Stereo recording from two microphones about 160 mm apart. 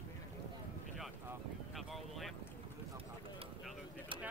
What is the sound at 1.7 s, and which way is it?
Boat, centre (ahead or behind).